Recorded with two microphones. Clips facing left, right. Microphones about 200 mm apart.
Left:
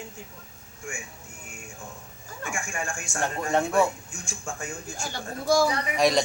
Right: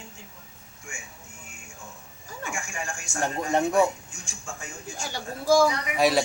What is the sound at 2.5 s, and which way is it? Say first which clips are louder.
Speech: left 2 dB; 55° left (ahead or behind).